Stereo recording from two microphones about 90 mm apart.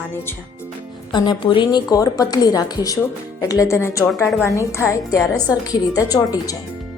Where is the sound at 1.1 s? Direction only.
60° left (ahead or behind).